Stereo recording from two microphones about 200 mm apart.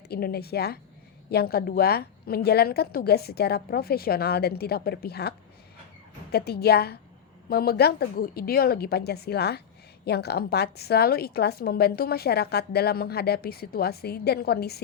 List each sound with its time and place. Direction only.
0.1 s a woman's voice: 50° left (ahead or behind)
6.3 s a woman's voice: 50° left (ahead or behind)